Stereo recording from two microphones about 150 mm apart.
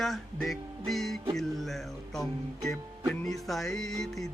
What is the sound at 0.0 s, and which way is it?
Music, centre (ahead or behind).